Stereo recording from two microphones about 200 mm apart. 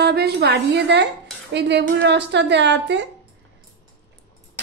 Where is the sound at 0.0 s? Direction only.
55° right (ahead or behind).